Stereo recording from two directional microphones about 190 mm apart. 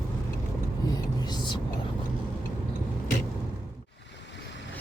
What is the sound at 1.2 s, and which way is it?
Whispering, 25° left (ahead or behind).